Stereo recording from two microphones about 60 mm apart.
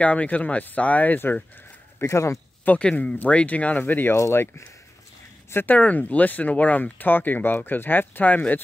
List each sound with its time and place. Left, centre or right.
0.0 s speech: left
2.0 s speech: left
2.6 s speech: left
2.9 s speech: centre
3.2 s speech: left
4.2 s speech: left
5.5 s speech: left
5.8 s speech: left